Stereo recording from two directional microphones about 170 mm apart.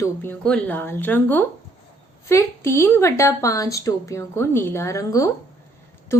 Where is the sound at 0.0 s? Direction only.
10° left (ahead or behind).